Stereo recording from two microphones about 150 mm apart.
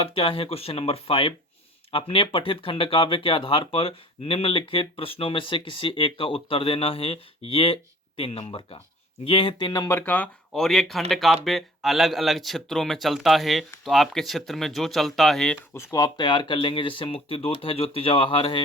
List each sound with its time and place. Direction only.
0.0 s speech: 35° left (ahead or behind)
10.1 s speech: 5° left (ahead or behind)
15.7 s speech: 20° left (ahead or behind); by 18.6 s 35° left (ahead or behind)